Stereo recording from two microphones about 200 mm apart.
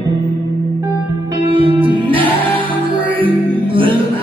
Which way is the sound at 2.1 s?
10° left (ahead or behind).